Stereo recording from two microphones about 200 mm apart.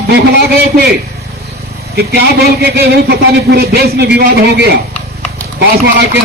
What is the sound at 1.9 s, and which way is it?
Speech, 55° right (ahead or behind).